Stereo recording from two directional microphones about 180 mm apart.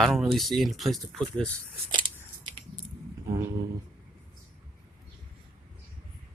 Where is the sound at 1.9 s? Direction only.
25° right (ahead or behind).